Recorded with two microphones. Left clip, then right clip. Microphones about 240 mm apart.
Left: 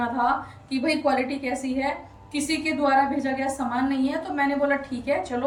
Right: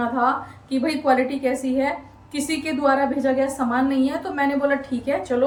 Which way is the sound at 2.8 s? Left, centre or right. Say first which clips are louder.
Right 3 dB; centre.